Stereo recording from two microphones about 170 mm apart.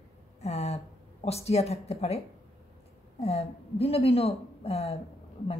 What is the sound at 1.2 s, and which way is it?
A woman's voice, 40° left (ahead or behind).